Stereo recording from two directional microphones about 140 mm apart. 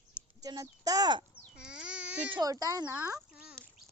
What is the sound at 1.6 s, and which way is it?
Baby cry, 5° right (ahead or behind).